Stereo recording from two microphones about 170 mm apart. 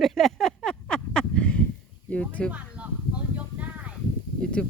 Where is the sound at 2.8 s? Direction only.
10° right (ahead or behind).